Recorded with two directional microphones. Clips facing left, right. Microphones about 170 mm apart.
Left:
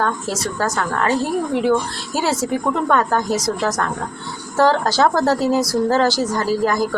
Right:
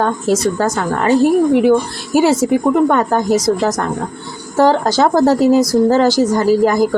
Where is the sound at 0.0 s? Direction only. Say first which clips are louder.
Right 7 dB; 20° right (ahead or behind).